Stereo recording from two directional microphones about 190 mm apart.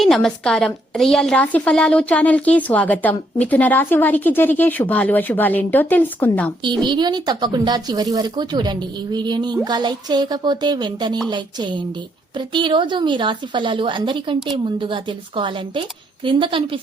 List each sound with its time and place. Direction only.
0.0 s a woman's voice: centre (ahead or behind)
6.7 s a woman's voice: 25° right (ahead or behind)